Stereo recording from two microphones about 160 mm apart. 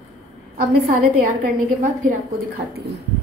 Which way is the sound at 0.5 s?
55° right (ahead or behind).